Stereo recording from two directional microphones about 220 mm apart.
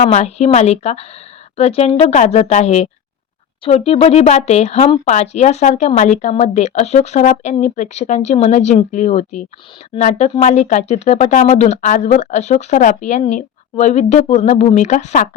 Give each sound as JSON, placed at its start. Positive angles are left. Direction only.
{"t": 0.0, "sound": "speech", "side_deg": 30}